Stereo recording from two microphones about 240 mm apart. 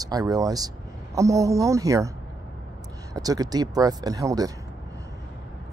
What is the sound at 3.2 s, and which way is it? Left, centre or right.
Speech, centre.